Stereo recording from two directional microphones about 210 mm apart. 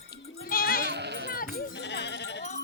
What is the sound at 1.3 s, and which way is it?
Sheep, 50° left (ahead or behind).